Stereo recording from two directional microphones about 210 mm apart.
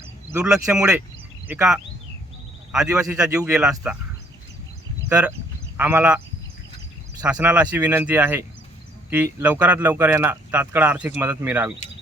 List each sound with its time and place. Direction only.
0.3 s speech: 5° right (ahead or behind)
3.2 s speech: 15° right (ahead or behind)
3.5 s speech: 5° right (ahead or behind)
5.0 s speech: 5° right (ahead or behind)
7.3 s speech: 5° right (ahead or behind)